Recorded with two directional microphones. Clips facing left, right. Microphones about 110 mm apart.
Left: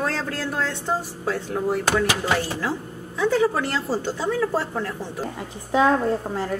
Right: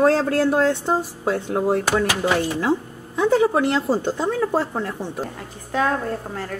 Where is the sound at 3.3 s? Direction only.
25° right (ahead or behind).